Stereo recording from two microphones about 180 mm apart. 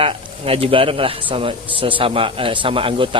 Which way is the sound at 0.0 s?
30° right (ahead or behind).